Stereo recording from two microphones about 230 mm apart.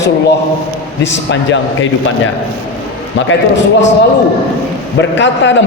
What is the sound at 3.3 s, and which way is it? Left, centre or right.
Speech, left.